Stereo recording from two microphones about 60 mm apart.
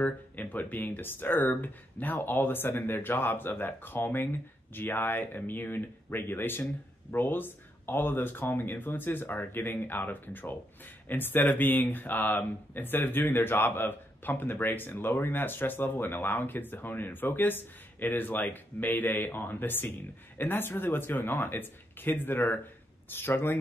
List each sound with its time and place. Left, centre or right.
0.0 s speech: left